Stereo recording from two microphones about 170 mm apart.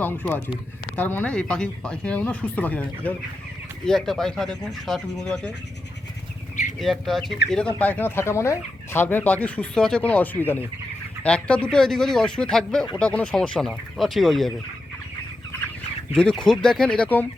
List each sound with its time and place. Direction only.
0.0 s speech: 10° left (ahead or behind)
6.7 s speech: centre (ahead or behind)
16.1 s speech: 5° left (ahead or behind)